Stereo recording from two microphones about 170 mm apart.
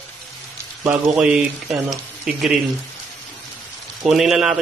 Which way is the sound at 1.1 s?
5° right (ahead or behind).